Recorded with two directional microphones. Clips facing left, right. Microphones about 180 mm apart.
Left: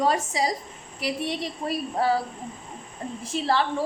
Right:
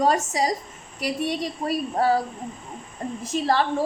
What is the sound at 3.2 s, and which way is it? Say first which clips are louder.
Speech: right 2 dB; 45° right (ahead or behind).